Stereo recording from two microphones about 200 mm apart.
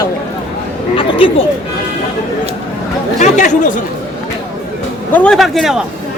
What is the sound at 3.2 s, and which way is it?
Speech, 40° left (ahead or behind).